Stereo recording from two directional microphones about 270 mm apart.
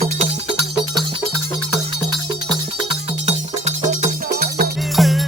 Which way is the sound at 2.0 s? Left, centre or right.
Centre.